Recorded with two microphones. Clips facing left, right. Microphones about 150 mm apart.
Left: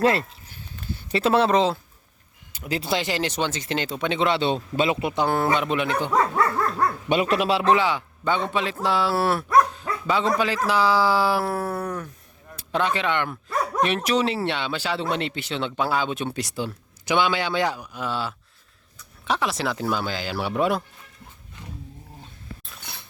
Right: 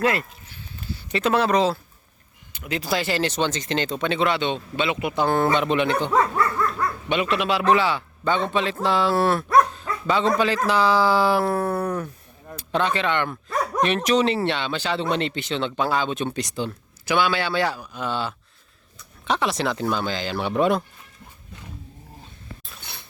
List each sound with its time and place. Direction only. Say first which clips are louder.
0.0 s speech: left 2 dB; 30° left (ahead or behind)
2.5 s speech: even; 35° left (ahead or behind)
5.1 s speech: right 5 dB; 10° left (ahead or behind)
7.1 s speech: left 1 dB; 40° left (ahead or behind); by 12.0 s 5° right (ahead or behind)
12.5 s speech: right 1 dB; 10° left (ahead or behind)
17.1 s speech: even; 20° left (ahead or behind)
18.0 s speech: right 1 dB; 5° left (ahead or behind)